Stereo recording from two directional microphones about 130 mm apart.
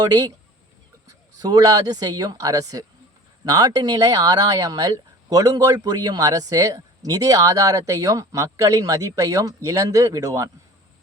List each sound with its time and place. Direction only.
0.0 s a man's voice: 30° right (ahead or behind)